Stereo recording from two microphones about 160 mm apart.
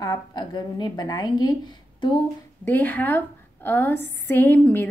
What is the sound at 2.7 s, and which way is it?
A woman's voice, 10° left (ahead or behind).